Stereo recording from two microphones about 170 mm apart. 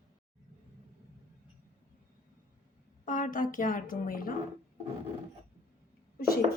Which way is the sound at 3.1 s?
50° left (ahead or behind).